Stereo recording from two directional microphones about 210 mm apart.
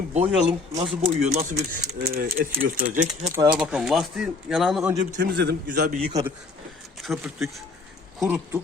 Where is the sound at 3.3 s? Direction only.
15° right (ahead or behind).